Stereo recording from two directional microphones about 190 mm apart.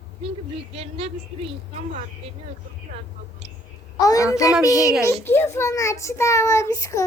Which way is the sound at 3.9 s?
20° left (ahead or behind).